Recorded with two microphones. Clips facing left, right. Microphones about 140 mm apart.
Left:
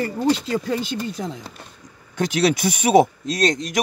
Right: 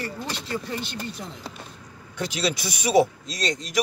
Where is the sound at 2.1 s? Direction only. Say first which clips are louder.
Left 7 dB; 50° left (ahead or behind).